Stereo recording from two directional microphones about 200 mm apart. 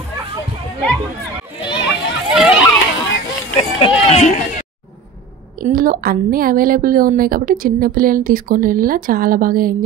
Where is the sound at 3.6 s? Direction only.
30° left (ahead or behind).